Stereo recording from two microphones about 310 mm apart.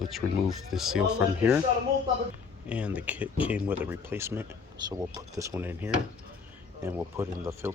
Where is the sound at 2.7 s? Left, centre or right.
Centre.